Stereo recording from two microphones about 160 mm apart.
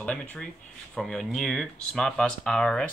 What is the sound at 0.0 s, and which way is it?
Speech, 10° left (ahead or behind).